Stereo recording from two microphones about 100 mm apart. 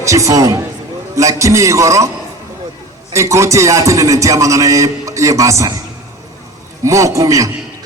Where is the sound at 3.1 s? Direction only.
30° right (ahead or behind).